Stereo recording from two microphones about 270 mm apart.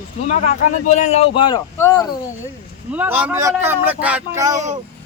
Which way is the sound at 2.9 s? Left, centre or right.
Centre.